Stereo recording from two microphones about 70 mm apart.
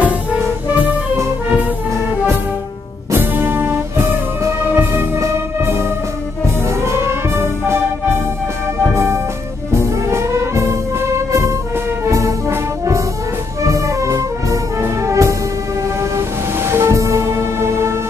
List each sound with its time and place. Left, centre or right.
0.0 s music: right
3.1 s music: right
6.7 s brass instrument: right
8.8 s music: right
9.7 s brass instrument: right
13.6 s music: right